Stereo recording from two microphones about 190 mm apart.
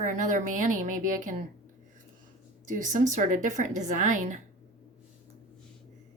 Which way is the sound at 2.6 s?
40° right (ahead or behind).